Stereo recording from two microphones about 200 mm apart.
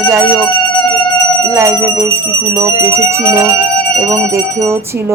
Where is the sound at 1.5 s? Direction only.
15° right (ahead or behind).